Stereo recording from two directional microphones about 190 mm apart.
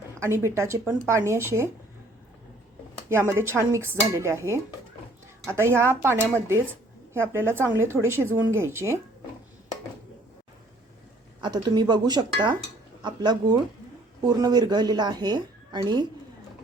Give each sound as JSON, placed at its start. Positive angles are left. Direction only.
{"t": 0.2, "sound": "speech", "side_deg": -15}
{"t": 3.1, "sound": "speech", "side_deg": -15}
{"t": 11.3, "sound": "speech", "side_deg": -25}